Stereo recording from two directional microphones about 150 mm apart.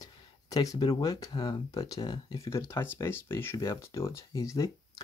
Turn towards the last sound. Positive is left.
turn(degrees=20)  # may be behind; listen again after turning